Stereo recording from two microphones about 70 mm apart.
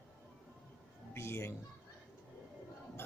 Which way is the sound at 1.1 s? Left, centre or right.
Left.